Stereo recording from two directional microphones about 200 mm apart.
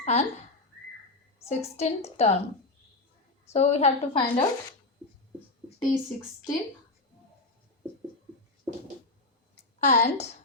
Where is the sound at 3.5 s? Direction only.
35° left (ahead or behind).